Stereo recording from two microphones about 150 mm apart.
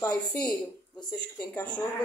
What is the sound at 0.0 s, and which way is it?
Speech, 10° left (ahead or behind).